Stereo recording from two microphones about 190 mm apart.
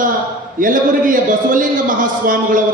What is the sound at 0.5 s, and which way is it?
A man's voice, 45° right (ahead or behind).